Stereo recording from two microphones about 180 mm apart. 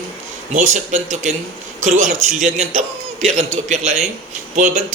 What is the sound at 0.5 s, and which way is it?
A man's voice, 45° right (ahead or behind).